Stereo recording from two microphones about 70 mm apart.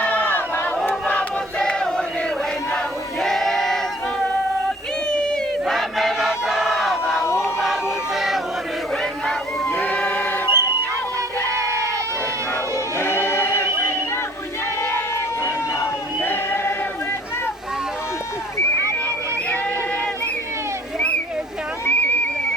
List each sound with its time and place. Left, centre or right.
0.0 s a sound: left
0.9 s choir: left
1.5 s chant: centre
2.7 s crowd: centre
5.0 s a sound: centre
5.7 s battle cry: centre
7.6 s music: centre
9.7 s choir: left
11.5 s goat: right
13.0 s choir: left
14.8 s a sound: left
21.8 s a sound: left